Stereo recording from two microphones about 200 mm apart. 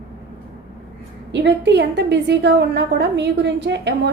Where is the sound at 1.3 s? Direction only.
60° right (ahead or behind).